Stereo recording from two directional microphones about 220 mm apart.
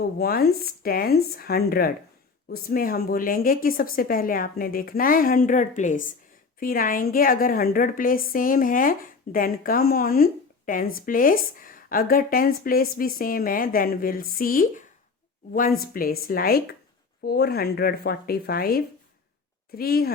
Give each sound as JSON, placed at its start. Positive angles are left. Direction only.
{"t": 0.0, "sound": "a woman's voice", "side_deg": 45}